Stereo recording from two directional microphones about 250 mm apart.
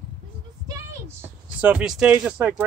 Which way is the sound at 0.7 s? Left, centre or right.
Centre.